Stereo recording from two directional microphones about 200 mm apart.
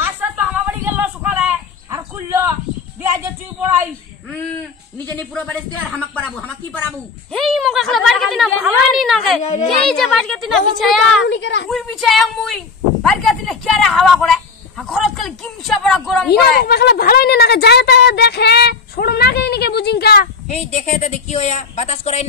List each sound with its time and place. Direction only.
0.0 s a sound: 10° right (ahead or behind)
5.3 s speech: 5° left (ahead or behind)
11.2 s a woman's voice: 65° left (ahead or behind)
11.7 s speech: centre (ahead or behind)
16.3 s a woman's voice: 50° left (ahead or behind)
20.4 s speech: 35° left (ahead or behind)